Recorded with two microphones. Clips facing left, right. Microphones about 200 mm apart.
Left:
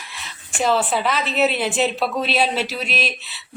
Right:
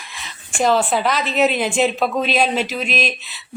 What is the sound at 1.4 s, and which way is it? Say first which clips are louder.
Speech: right 3 dB; 45° right (ahead or behind).